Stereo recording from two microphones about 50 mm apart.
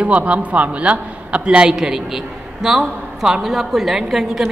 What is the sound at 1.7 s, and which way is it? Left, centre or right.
A man's voice, centre.